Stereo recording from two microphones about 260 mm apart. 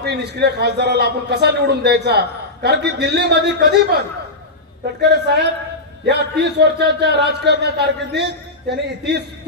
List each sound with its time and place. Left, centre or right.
0.0 s a man's voice: right
5.1 s a man's voice: right